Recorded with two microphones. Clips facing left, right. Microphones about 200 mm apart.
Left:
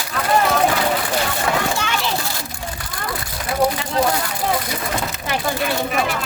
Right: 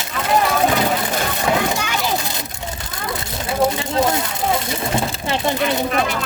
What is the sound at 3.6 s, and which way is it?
Speech, 25° right (ahead or behind).